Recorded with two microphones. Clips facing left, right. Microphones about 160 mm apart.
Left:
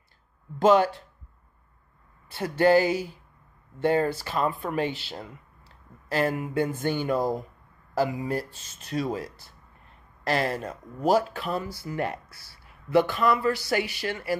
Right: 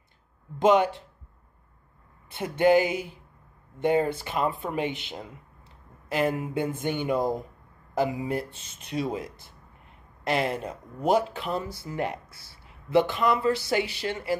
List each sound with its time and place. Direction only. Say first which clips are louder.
0.6 s speech: left 1 dB; 20° right (ahead or behind)
2.2 s speech: even; 20° right (ahead or behind)